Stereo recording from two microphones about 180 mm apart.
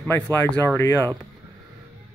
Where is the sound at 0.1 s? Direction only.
10° left (ahead or behind).